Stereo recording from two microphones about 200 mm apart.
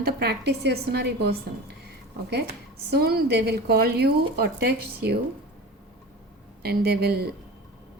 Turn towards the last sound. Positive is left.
turn(degrees=-50)  # may be behind; listen again after turning